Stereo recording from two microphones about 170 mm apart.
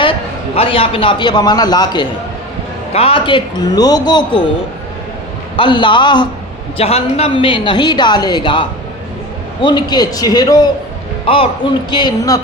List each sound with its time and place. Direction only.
0.5 s a woman's voice: 35° left (ahead or behind)
2.9 s a woman's voice: 35° left (ahead or behind)
5.5 s a woman's voice: 30° left (ahead or behind)
6.7 s a woman's voice: 35° left (ahead or behind)